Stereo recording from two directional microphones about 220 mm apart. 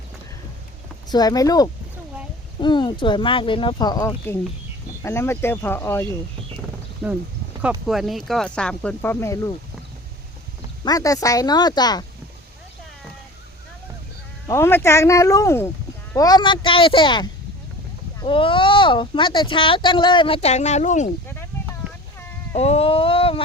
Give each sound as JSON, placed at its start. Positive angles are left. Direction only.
{"t": 1.1, "sound": "speech", "side_deg": 15}
{"t": 7.0, "sound": "speech", "side_deg": 0}
{"t": 10.8, "sound": "speech", "side_deg": 15}
{"t": 14.4, "sound": "speech", "side_deg": 10}
{"t": 22.5, "sound": "a sound", "side_deg": 30}